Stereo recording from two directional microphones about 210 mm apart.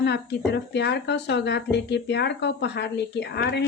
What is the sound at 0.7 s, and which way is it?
Speech, 55° left (ahead or behind).